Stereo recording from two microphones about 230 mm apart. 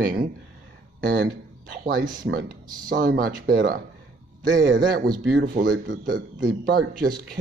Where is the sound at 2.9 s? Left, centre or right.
Right.